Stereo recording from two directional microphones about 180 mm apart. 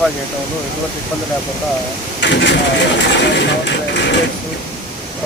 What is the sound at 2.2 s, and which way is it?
Speech, 75° left (ahead or behind).